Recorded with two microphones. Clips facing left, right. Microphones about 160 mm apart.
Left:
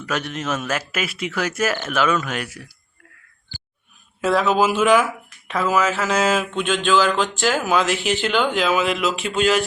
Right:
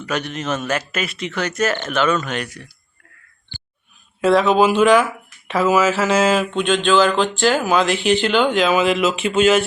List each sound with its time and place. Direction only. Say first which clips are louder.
0.0 s speech: right 2 dB; centre (ahead or behind)
4.2 s speech: right 4 dB; centre (ahead or behind)
5.5 s speech: right 4 dB; 5° right (ahead or behind)